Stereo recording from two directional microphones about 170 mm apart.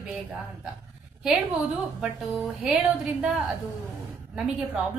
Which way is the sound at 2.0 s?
Centre (ahead or behind).